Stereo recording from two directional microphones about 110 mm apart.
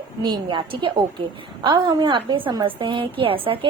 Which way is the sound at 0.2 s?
45° right (ahead or behind).